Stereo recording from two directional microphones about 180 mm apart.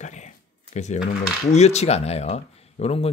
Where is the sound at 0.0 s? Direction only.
40° left (ahead or behind).